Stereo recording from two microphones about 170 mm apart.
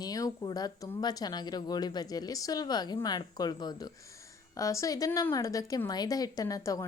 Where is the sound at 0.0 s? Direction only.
20° left (ahead or behind).